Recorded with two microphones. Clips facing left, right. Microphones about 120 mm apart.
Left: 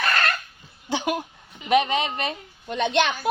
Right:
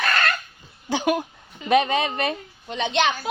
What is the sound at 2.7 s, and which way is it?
Speech, 55° left (ahead or behind).